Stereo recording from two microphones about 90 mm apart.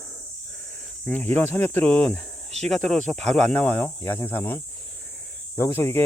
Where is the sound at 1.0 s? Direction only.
20° left (ahead or behind).